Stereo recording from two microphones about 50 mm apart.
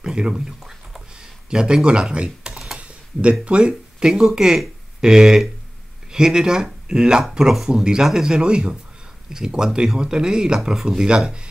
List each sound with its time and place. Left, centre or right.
0.0 s typing: centre
2.8 s a sound: right
4.1 s speech: centre